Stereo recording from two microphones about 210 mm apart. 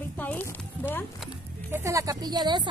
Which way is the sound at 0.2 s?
5° left (ahead or behind).